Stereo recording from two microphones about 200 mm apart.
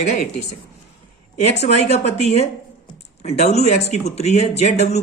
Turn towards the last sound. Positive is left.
turn(degrees=35)  # may be behind; listen again after turning